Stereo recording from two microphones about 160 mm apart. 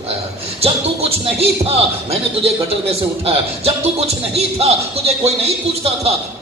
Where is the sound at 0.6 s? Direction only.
40° right (ahead or behind).